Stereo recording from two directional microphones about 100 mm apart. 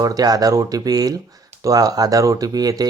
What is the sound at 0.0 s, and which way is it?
Speech, 40° right (ahead or behind).